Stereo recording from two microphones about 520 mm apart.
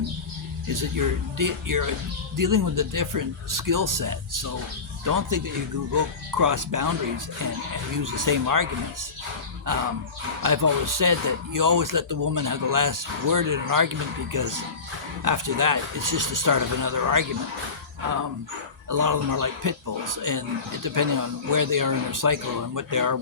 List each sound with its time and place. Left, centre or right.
0.7 s speech: right
9.7 s speech: right
18.9 s speech: right